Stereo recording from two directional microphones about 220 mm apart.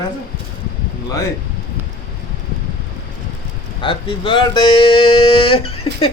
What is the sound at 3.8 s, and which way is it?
Speech, 25° left (ahead or behind).